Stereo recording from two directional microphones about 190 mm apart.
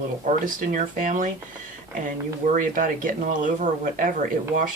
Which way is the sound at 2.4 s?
45° right (ahead or behind).